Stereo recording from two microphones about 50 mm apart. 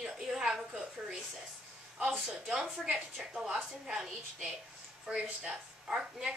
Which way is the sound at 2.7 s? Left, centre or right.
Centre.